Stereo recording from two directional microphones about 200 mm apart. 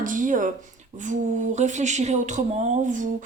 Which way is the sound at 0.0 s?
40° right (ahead or behind).